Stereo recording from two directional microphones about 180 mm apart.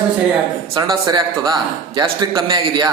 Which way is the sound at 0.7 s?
25° right (ahead or behind).